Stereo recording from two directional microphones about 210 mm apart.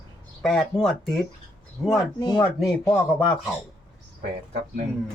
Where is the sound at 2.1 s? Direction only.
20° left (ahead or behind).